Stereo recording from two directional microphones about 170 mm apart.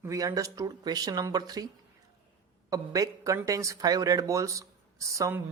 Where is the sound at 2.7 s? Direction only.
20° right (ahead or behind).